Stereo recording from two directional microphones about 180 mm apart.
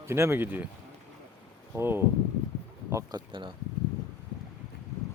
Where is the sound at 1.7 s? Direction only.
15° right (ahead or behind).